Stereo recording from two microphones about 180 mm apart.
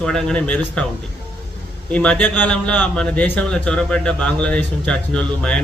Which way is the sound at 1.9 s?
5° left (ahead or behind).